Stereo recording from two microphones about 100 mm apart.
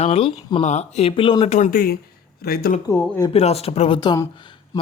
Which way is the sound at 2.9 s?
30° left (ahead or behind).